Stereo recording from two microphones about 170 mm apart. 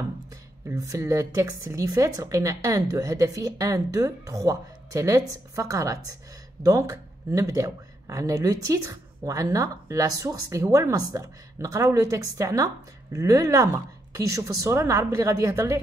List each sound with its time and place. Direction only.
0.3 s a woman's voice: 20° right (ahead or behind)